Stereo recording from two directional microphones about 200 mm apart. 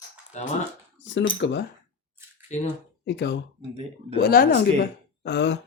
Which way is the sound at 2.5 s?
35° left (ahead or behind).